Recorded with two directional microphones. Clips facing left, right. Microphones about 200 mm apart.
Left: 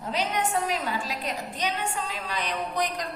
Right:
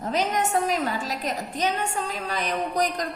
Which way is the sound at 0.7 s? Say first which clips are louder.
Right 3 dB; 45° right (ahead or behind).